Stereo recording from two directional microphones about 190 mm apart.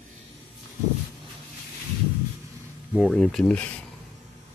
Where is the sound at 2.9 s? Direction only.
Centre (ahead or behind).